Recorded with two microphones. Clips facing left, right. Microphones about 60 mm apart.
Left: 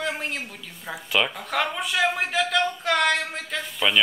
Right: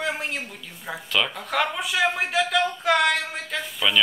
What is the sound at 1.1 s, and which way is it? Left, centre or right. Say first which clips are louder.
Speech: left 1 dB; centre.